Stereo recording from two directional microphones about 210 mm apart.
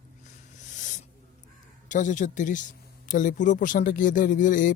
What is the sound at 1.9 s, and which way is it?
Speech, 35° left (ahead or behind).